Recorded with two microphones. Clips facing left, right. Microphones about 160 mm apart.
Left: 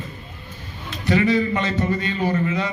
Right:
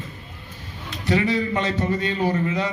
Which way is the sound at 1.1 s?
30° right (ahead or behind).